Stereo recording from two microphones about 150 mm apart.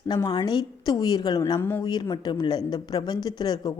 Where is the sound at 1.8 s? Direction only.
30° left (ahead or behind).